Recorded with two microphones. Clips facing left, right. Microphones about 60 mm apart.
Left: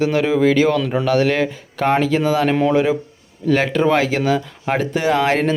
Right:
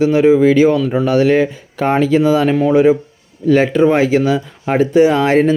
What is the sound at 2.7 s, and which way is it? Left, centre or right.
Speech, right.